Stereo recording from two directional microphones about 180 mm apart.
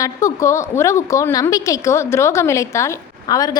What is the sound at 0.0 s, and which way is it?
A woman's voice, 15° left (ahead or behind).